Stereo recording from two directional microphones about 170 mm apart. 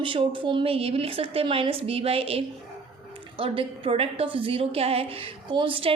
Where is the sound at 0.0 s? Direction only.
30° right (ahead or behind).